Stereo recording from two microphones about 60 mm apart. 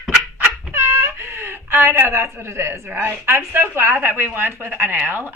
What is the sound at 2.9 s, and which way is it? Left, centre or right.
Speech, right.